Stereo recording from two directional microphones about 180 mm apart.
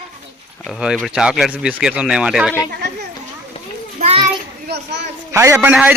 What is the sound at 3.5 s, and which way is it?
Children playing, 35° left (ahead or behind).